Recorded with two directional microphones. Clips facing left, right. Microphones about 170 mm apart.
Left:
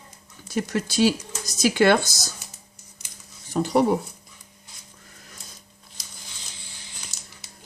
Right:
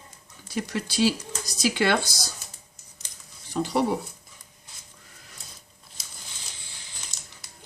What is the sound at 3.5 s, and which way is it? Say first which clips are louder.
Speech: left 4 dB; 45° left (ahead or behind).